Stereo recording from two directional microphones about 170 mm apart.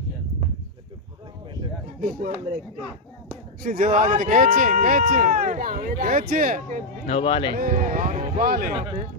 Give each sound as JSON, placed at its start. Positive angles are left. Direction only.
{"t": 2.0, "sound": "speech", "side_deg": -50}
{"t": 3.6, "sound": "speech", "side_deg": -50}
{"t": 7.1, "sound": "speech", "side_deg": 30}
{"t": 7.5, "sound": "speech", "side_deg": -55}
{"t": 8.7, "sound": "speech", "side_deg": -35}